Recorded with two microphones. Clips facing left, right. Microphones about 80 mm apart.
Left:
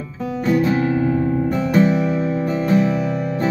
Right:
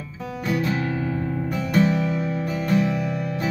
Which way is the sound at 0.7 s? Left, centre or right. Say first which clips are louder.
Left 7 dB; centre.